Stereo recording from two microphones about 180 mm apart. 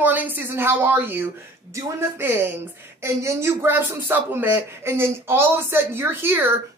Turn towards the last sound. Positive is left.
turn(degrees=-10)  # may be behind; listen again after turning